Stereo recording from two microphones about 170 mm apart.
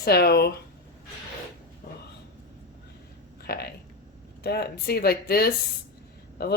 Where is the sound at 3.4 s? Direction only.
70° left (ahead or behind).